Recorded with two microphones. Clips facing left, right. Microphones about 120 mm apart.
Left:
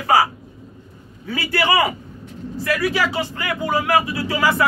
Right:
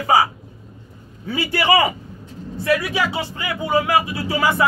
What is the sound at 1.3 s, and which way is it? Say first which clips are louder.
A man's voice: right 1 dB; 20° right (ahead or behind).